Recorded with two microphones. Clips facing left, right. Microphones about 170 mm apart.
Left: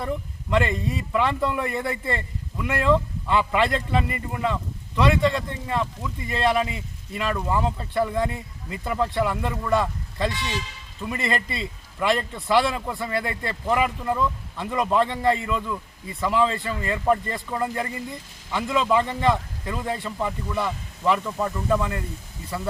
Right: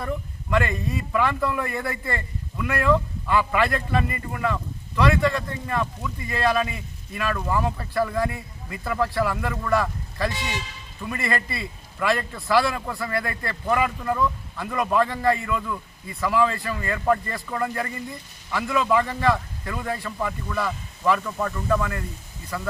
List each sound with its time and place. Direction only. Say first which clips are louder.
0.5 s a man's voice: left 1 dB; 20° left (ahead or behind)